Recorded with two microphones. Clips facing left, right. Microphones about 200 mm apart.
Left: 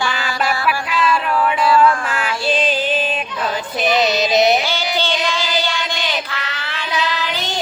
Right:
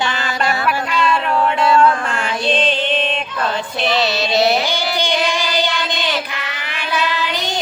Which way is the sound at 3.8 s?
20° left (ahead or behind).